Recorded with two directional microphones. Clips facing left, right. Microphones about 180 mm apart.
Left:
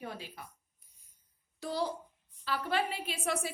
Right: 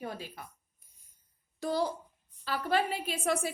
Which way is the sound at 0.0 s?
40° right (ahead or behind).